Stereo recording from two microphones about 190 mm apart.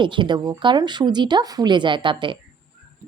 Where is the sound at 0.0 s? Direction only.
25° right (ahead or behind).